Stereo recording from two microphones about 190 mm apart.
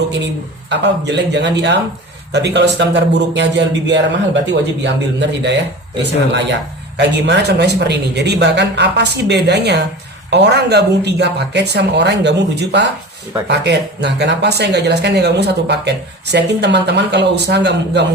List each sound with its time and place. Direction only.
0.7 s speech: 65° right (ahead or behind)
6.9 s speech: 65° right (ahead or behind)